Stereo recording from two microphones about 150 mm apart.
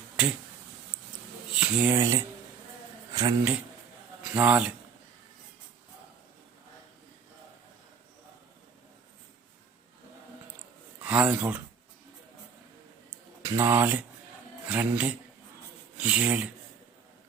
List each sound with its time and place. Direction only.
1.5 s speech: 10° right (ahead or behind)
2.0 s speech: 20° right (ahead or behind)
4.2 s speech: 10° right (ahead or behind)
11.0 s speech: 10° right (ahead or behind)
13.4 s speech: 15° right (ahead or behind)